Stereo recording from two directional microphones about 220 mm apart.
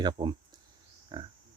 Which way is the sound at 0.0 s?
20° right (ahead or behind).